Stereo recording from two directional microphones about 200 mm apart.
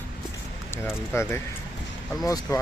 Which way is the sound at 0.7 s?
15° left (ahead or behind).